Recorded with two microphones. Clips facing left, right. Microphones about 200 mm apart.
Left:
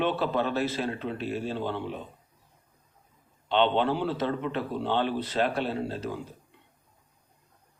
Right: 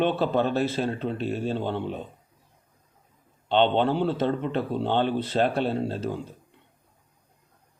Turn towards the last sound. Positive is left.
turn(degrees=-30)  # may be behind; listen again after turning